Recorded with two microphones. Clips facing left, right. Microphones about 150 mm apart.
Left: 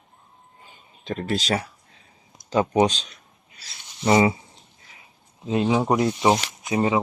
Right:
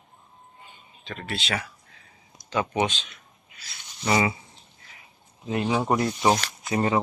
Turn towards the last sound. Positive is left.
turn(degrees=15)  # may be behind; listen again after turning